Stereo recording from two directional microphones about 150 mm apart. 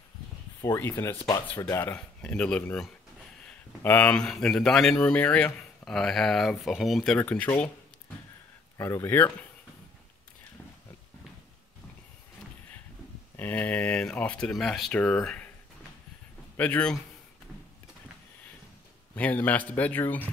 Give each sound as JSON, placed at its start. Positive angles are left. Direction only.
{"t": 0.7, "sound": "speech", "side_deg": 15}
{"t": 8.7, "sound": "speech", "side_deg": 20}
{"t": 13.4, "sound": "speech", "side_deg": 10}
{"t": 16.5, "sound": "speech", "side_deg": 10}
{"t": 19.1, "sound": "speech", "side_deg": 10}